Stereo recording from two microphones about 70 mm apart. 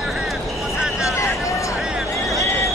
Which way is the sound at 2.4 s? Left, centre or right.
Left.